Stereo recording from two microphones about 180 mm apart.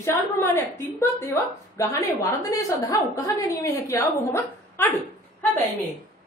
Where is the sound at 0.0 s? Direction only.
10° left (ahead or behind).